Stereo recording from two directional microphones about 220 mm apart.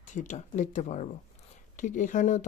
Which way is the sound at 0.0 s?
35° left (ahead or behind).